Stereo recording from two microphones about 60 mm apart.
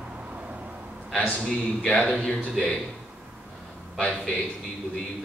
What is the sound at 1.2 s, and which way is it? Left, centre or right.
Speech, centre.